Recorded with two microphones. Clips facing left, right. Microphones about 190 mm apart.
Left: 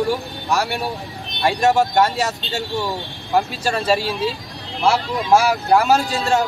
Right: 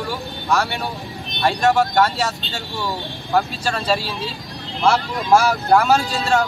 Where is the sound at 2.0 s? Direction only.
15° left (ahead or behind).